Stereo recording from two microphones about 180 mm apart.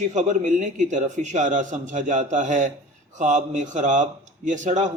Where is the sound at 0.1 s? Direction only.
45° right (ahead or behind).